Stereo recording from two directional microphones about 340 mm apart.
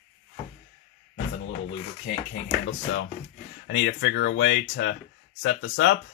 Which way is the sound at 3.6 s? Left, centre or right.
Left.